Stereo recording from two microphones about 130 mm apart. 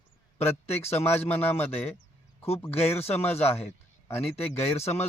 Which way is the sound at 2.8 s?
15° left (ahead or behind).